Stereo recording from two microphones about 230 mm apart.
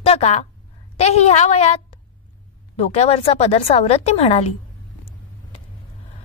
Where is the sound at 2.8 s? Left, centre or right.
Left.